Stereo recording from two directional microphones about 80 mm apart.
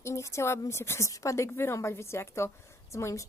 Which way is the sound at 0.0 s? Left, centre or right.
Left.